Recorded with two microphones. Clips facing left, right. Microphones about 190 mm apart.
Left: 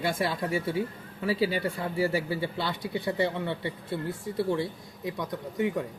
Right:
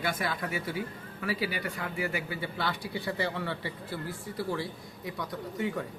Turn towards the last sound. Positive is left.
turn(degrees=20)  # may be behind; listen again after turning